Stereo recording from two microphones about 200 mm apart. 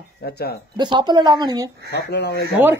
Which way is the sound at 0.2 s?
50° left (ahead or behind).